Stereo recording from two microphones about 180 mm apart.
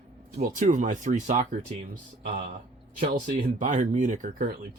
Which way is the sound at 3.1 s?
45° right (ahead or behind).